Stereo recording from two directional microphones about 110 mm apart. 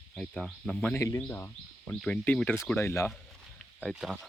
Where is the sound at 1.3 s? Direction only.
20° left (ahead or behind).